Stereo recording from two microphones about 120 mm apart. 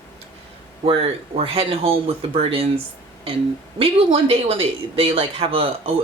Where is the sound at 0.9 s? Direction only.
55° right (ahead or behind).